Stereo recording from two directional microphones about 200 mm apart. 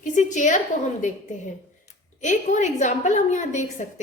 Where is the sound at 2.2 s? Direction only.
35° left (ahead or behind).